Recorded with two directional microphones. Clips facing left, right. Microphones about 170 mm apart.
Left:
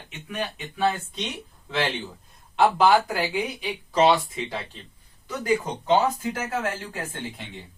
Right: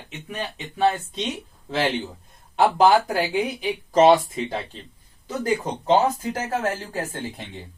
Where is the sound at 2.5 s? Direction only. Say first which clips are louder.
Right 2 dB; 40° right (ahead or behind).